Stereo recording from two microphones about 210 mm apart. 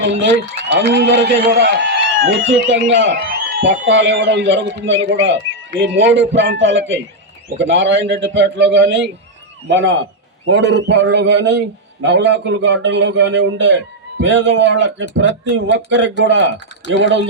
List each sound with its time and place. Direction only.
0.0 s a man's voice: 60° right (ahead or behind)